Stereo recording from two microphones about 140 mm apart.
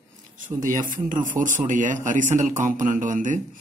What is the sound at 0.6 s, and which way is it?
Speech, 70° right (ahead or behind).